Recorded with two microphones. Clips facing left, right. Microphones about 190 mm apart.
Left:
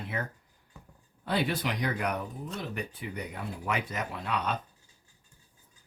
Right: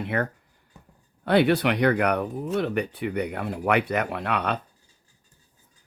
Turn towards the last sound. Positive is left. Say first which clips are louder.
# right 6 dB
turn(degrees=-65)  # may be behind; listen again after turning